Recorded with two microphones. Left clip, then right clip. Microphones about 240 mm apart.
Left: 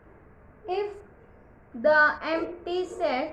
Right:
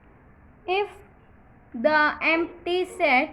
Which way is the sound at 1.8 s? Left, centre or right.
Right.